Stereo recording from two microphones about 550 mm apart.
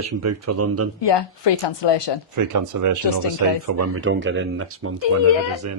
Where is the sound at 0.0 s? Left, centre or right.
Right.